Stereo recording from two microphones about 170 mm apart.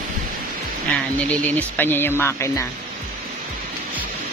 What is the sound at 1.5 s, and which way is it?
Speech, 10° left (ahead or behind).